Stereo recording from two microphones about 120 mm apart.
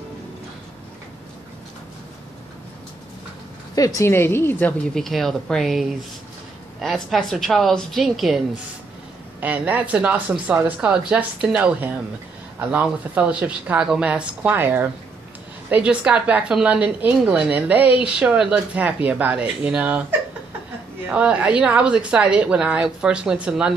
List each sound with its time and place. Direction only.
3.7 s a woman's voice: 30° left (ahead or behind)
4.9 s a woman's voice: centre (ahead or behind)
9.4 s a woman's voice: 15° right (ahead or behind)